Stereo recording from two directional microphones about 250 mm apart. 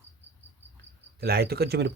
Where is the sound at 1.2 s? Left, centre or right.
Right.